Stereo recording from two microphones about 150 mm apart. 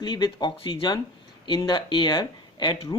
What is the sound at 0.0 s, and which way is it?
Speech, 30° left (ahead or behind).